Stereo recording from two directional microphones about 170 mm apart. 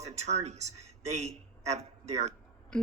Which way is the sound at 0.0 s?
40° right (ahead or behind).